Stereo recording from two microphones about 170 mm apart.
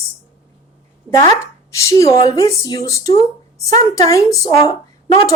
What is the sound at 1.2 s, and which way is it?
Speech, 20° left (ahead or behind).